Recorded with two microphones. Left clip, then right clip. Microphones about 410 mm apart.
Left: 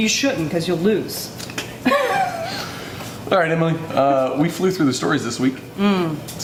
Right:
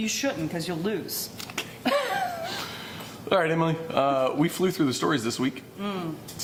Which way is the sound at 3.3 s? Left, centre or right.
Right.